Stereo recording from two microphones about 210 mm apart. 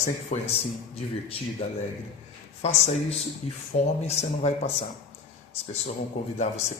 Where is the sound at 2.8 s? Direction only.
30° left (ahead or behind).